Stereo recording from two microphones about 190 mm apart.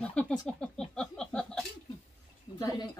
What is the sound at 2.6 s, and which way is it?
Speech, 20° left (ahead or behind).